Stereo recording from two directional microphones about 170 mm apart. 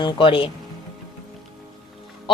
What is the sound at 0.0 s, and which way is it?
Speech, 30° left (ahead or behind).